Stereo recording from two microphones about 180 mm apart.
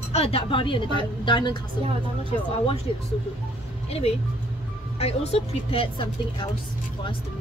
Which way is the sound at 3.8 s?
35° left (ahead or behind).